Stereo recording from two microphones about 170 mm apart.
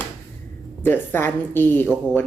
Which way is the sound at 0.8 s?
10° left (ahead or behind).